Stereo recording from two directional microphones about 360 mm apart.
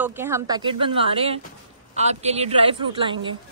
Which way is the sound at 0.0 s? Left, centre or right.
Centre.